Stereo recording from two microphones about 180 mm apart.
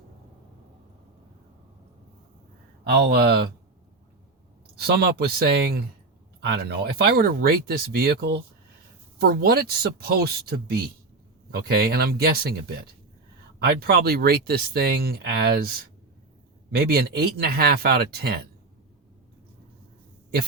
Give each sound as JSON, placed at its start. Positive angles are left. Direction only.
{"t": 2.9, "sound": "speech", "side_deg": -60}
{"t": 4.8, "sound": "speech", "side_deg": -60}
{"t": 13.7, "sound": "speech", "side_deg": -60}
{"t": 16.7, "sound": "speech", "side_deg": -60}